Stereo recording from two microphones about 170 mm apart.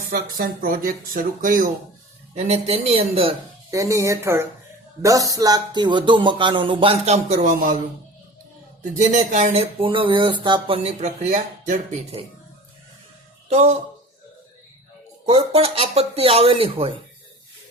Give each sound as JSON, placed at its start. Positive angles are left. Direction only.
{"t": 0.3, "sound": "speech", "side_deg": -55}
{"t": 2.3, "sound": "speech", "side_deg": -40}
{"t": 3.7, "sound": "speech", "side_deg": -20}
{"t": 8.8, "sound": "speech", "side_deg": -45}
{"t": 11.0, "sound": "speech", "side_deg": -45}
{"t": 13.5, "sound": "speech", "side_deg": -40}
{"t": 15.3, "sound": "speech", "side_deg": -35}